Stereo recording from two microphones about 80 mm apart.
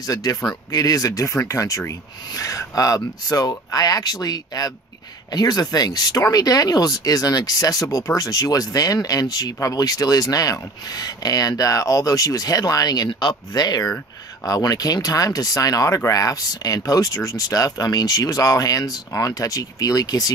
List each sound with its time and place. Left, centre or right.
0.0 s speech: left